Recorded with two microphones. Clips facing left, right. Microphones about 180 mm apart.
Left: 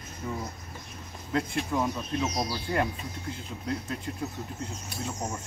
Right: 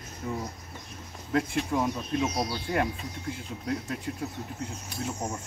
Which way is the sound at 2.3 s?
25° right (ahead or behind).